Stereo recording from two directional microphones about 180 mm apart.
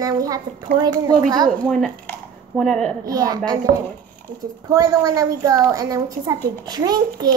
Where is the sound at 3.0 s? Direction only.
20° right (ahead or behind).